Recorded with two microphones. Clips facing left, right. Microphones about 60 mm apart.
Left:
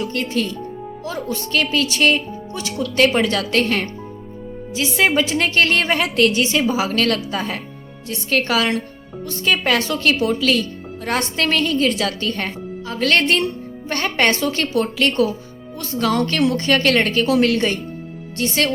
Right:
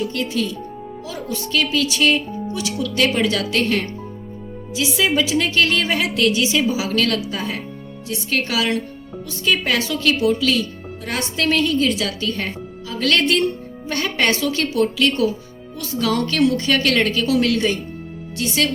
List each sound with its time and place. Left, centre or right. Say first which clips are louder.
0.0 s a woman's voice: even; left